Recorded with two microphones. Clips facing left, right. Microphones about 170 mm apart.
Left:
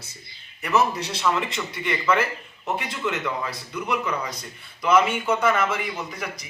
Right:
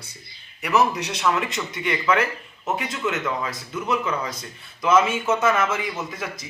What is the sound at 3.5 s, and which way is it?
A man's voice, 25° right (ahead or behind).